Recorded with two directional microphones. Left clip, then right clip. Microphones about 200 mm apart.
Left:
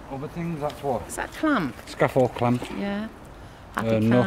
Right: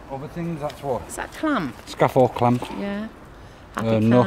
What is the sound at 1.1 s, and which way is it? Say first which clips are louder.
Speech: even; centre (ahead or behind).